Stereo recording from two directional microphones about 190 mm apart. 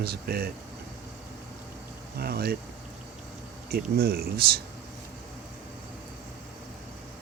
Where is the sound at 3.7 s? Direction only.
55° right (ahead or behind).